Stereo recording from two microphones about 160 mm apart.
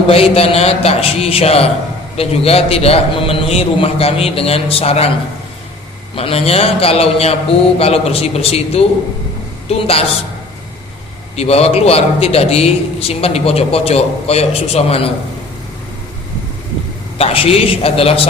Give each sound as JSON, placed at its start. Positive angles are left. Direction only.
{"t": 0.1, "sound": "a man's voice", "side_deg": 35}
{"t": 6.1, "sound": "a man's voice", "side_deg": 35}
{"t": 11.3, "sound": "a man's voice", "side_deg": 40}
{"t": 17.2, "sound": "a man's voice", "side_deg": 40}